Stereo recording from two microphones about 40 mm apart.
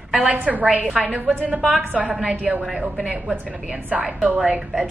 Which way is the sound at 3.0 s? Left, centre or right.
Right.